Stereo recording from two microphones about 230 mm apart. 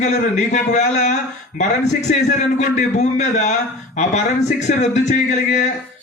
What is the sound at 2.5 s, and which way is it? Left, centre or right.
A man's voice, left.